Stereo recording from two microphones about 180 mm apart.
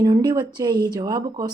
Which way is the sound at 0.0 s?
20° right (ahead or behind).